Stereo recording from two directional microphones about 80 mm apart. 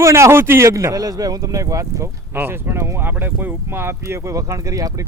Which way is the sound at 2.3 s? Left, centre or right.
Right.